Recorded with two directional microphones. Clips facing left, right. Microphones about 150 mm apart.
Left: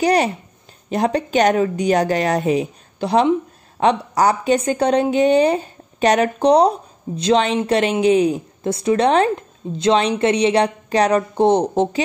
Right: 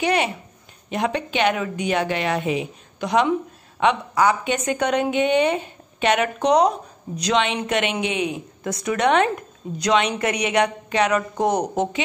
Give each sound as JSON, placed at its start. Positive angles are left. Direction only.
{"t": 0.0, "sound": "speech", "side_deg": 35}